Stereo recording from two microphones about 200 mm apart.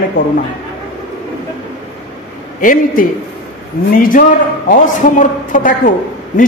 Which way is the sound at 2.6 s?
40° left (ahead or behind).